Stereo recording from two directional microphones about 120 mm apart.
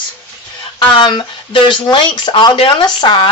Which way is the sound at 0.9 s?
40° left (ahead or behind).